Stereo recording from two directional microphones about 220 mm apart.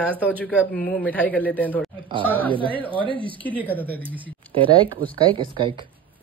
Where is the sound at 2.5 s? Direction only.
25° right (ahead or behind).